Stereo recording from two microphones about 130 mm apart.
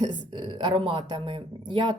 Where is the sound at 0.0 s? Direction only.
35° right (ahead or behind).